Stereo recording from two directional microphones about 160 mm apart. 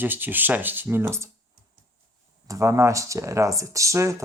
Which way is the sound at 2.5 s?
20° right (ahead or behind).